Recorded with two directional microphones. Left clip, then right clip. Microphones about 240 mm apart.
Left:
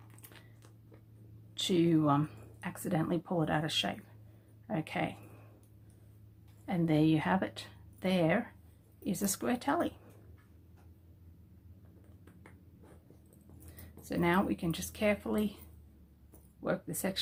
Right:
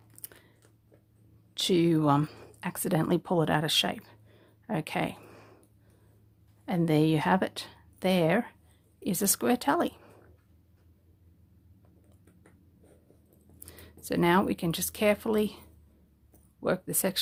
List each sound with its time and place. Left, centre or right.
1.5 s speech: right
6.7 s speech: right
14.0 s speech: right
16.6 s speech: right